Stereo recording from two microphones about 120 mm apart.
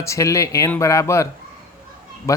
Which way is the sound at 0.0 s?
25° left (ahead or behind).